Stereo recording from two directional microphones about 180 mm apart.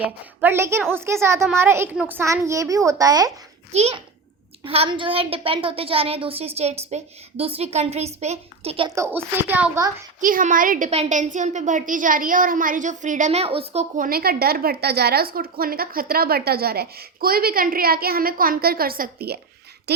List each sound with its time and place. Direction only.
0.0 s a child's voice: 10° right (ahead or behind)
3.7 s a woman's voice: 35° right (ahead or behind)
9.0 s a child's voice: 10° right (ahead or behind)
10.2 s a woman's voice: 50° right (ahead or behind); by 13.8 s 35° right (ahead or behind)
13.9 s a woman's voice: 50° right (ahead or behind)